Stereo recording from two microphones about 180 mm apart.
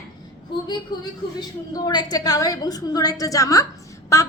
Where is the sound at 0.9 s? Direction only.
25° left (ahead or behind).